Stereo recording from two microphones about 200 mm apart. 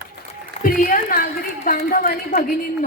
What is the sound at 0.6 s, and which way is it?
A woman's voice, 45° left (ahead or behind).